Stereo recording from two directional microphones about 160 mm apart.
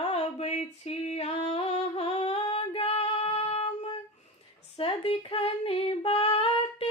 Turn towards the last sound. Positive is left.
turn(degrees=40)  # may be behind; listen again after turning